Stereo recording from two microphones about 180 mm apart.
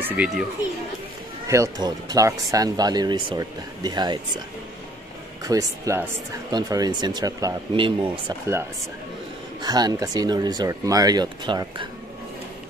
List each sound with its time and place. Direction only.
0.0 s speech: 10° right (ahead or behind)
1.5 s speech: 20° right (ahead or behind)
5.4 s speech: 20° right (ahead or behind)
9.6 s speech: 20° right (ahead or behind)